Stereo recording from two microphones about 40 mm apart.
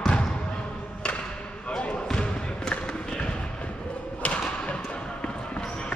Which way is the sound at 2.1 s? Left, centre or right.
Centre.